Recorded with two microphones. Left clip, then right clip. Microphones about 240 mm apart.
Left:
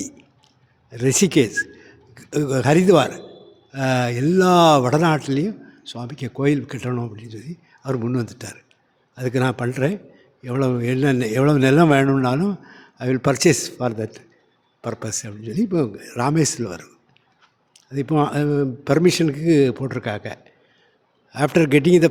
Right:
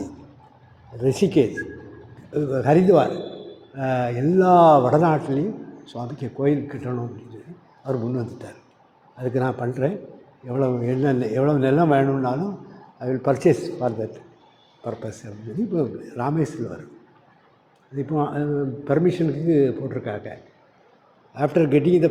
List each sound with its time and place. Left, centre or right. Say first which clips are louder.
0.9 s a man's voice: left 2 dB; left
5.9 s speech: even; left
6.3 s a man's voice: left 1 dB; left
17.9 s a man's voice: left 4 dB; left
21.3 s speech: left 2 dB; left